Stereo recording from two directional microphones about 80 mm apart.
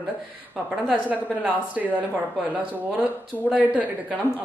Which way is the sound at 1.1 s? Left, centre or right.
Centre.